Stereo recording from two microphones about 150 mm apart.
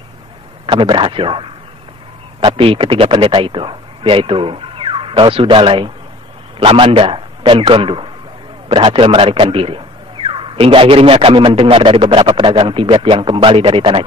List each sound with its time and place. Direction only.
0.7 s speech: 35° right (ahead or behind)